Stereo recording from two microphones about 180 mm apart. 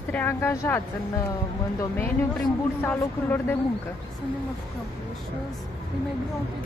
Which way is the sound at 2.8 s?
10° left (ahead or behind).